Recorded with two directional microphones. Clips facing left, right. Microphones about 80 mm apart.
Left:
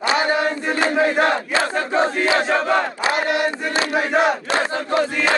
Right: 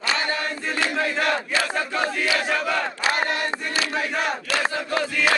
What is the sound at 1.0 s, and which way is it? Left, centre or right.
Battle cry, left.